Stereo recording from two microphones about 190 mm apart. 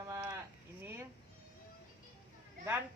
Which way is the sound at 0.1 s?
15° right (ahead or behind).